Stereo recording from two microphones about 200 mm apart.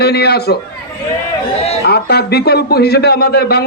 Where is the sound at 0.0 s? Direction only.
55° left (ahead or behind).